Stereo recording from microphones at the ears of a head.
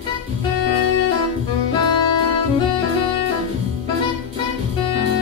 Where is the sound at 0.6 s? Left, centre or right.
Left.